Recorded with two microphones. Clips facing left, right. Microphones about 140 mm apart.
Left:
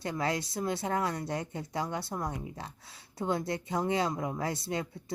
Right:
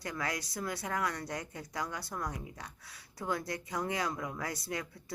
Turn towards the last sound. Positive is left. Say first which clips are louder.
# left 5 dB
turn(degrees=25)  # may be behind; listen again after turning